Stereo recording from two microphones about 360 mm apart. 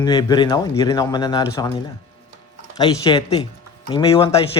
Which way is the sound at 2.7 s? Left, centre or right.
Centre.